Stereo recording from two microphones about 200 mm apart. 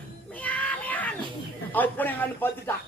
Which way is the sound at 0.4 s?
10° left (ahead or behind).